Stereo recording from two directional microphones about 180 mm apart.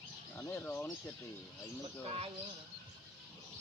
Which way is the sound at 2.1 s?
35° right (ahead or behind).